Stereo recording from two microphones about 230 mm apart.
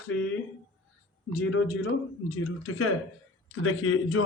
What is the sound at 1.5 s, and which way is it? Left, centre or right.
Speech, left.